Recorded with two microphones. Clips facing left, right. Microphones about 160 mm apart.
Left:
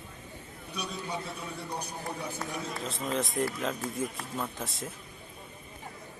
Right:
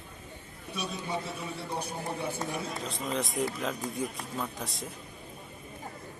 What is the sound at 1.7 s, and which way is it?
Speech, 25° right (ahead or behind).